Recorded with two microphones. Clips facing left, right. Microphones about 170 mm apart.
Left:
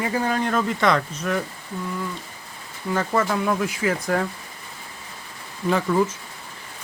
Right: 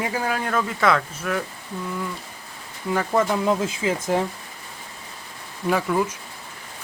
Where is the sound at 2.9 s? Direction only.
15° right (ahead or behind).